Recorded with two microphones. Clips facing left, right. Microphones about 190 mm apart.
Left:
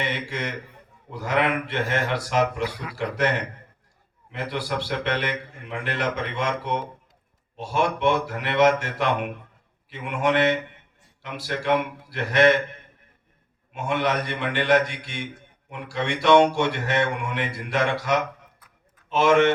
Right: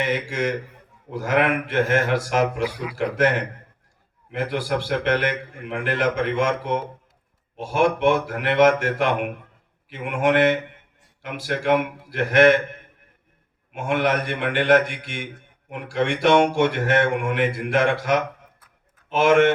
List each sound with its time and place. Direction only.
1.1 s speech: 50° right (ahead or behind)
13.7 s speech: 55° right (ahead or behind)